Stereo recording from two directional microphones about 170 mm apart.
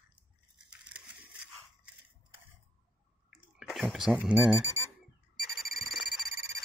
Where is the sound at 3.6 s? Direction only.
Centre (ahead or behind).